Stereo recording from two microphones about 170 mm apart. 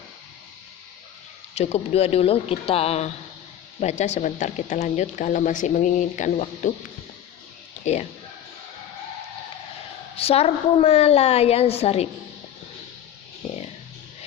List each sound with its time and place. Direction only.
1.5 s a woman's voice: 40° left (ahead or behind)
10.2 s a woman's voice: 35° left (ahead or behind)